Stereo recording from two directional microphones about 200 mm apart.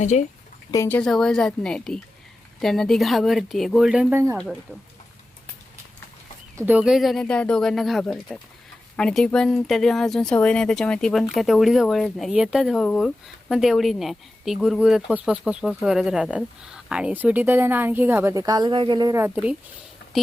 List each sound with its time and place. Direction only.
0.0 s speech: 35° left (ahead or behind)
0.7 s speech: 10° left (ahead or behind)
6.6 s speech: 10° right (ahead or behind)